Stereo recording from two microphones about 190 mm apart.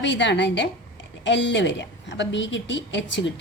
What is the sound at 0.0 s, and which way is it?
A woman's voice, 70° left (ahead or behind).